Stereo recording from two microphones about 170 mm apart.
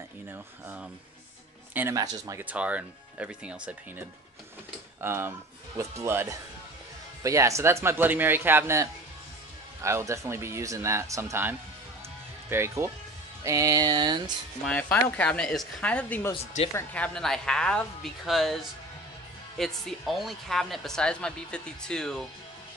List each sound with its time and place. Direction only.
0.3 s speech: 10° right (ahead or behind)
5.0 s speech: 15° right (ahead or behind)
9.8 s speech: 15° right (ahead or behind)
13.4 s music: 20° right (ahead or behind)
14.6 s speech: 5° left (ahead or behind)